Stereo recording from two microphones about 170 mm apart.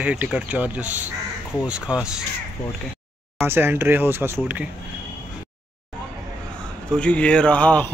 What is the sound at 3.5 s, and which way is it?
Speech, 10° right (ahead or behind).